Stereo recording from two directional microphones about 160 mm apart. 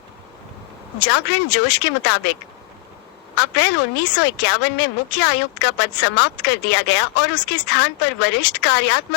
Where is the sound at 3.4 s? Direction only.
90° left.